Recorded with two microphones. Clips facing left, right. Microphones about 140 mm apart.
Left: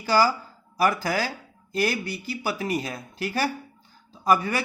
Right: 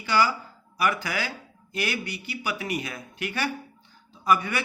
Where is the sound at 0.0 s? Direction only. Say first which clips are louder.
Left 3 dB; 40° left (ahead or behind).